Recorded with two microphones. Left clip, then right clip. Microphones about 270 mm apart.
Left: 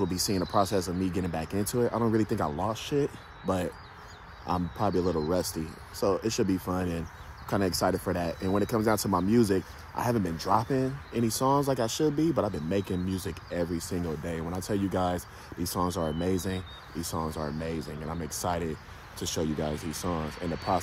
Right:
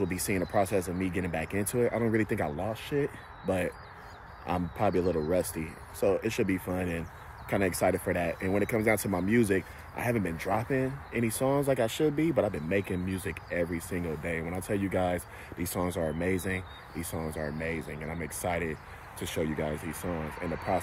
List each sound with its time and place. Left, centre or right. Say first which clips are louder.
0.0 s speech: left 1 dB; centre